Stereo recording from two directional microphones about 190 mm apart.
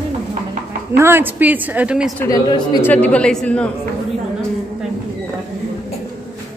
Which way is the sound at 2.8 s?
5° left (ahead or behind).